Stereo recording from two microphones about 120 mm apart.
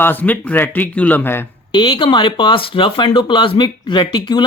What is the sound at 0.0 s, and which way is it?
A man's voice, 15° left (ahead or behind).